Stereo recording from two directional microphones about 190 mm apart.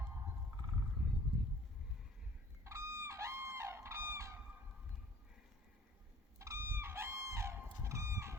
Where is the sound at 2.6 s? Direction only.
15° right (ahead or behind).